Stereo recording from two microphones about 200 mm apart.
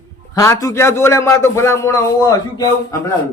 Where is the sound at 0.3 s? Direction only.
15° left (ahead or behind).